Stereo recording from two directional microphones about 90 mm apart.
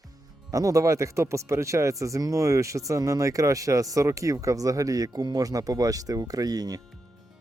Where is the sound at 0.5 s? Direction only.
40° right (ahead or behind).